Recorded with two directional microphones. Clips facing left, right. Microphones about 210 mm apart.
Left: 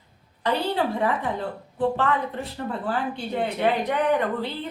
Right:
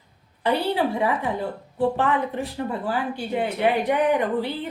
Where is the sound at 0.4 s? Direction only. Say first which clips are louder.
Right 2 dB; 10° right (ahead or behind).